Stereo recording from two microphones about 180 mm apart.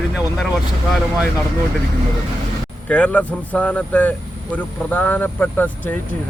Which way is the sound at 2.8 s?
5° left (ahead or behind).